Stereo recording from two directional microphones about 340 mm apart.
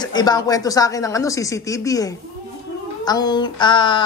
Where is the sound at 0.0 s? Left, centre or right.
Centre.